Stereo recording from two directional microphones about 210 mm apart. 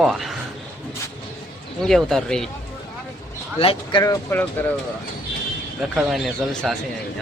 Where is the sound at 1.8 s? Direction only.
Centre (ahead or behind).